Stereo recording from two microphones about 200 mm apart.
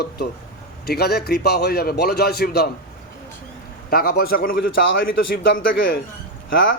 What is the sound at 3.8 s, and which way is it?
A man's voice, 50° left (ahead or behind).